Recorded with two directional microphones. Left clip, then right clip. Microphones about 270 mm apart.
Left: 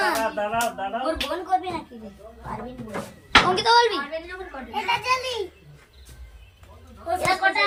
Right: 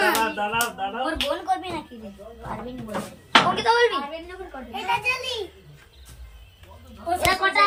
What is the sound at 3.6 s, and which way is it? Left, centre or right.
Speech, centre.